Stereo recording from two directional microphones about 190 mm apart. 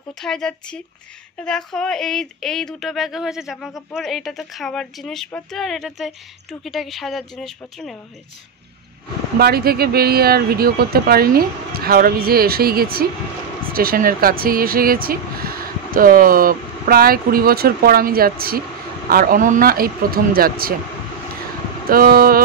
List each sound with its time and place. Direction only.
0.2 s speech: 5° left (ahead or behind)
9.4 s speech: 55° right (ahead or behind)
21.8 s speech: 50° right (ahead or behind)